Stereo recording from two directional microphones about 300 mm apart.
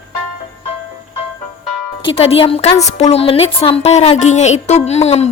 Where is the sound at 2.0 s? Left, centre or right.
Centre.